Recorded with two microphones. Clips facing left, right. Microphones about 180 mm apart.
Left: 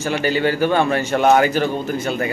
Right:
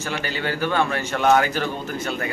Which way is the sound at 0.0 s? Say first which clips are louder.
Left 8 dB; 15° left (ahead or behind).